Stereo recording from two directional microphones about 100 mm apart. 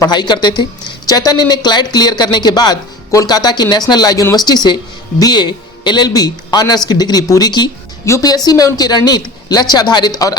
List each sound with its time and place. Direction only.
0.1 s a woman's voice: 45° left (ahead or behind)